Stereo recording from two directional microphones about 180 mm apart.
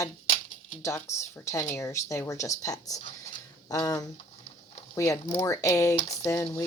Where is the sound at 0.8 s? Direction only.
15° left (ahead or behind).